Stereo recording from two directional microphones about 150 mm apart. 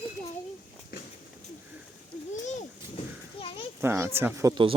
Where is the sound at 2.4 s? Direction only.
50° left (ahead or behind).